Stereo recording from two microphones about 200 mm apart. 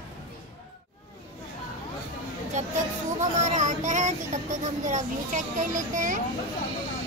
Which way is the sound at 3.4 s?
35° right (ahead or behind).